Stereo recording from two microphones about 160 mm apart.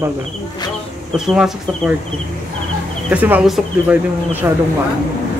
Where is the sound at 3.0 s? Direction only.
10° right (ahead or behind).